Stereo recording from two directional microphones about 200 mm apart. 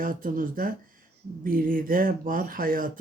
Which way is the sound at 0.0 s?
45° right (ahead or behind).